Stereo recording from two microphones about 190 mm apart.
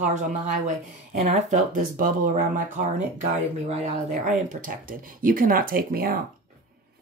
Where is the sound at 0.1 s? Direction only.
40° right (ahead or behind).